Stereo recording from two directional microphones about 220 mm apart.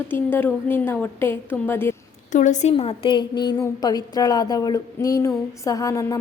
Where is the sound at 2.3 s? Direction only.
35° left (ahead or behind).